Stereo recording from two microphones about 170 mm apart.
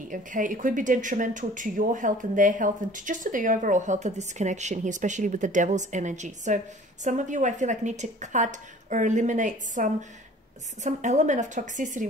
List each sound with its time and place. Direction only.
0.1 s speech: 50° right (ahead or behind)